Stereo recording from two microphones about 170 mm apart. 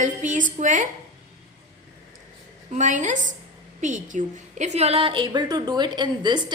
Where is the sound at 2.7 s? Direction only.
45° right (ahead or behind).